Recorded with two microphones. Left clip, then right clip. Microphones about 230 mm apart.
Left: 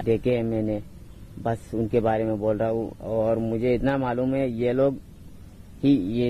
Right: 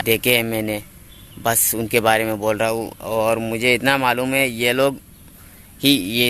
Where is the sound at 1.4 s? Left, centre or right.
Right.